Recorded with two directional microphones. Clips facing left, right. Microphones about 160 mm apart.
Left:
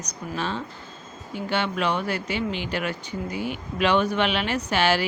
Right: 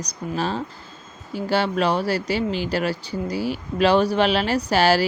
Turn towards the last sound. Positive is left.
turn(degrees=-35)  # may be behind; listen again after turning